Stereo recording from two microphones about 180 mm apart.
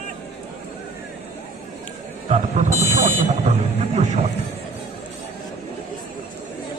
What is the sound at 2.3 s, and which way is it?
Buzzer, 40° right (ahead or behind).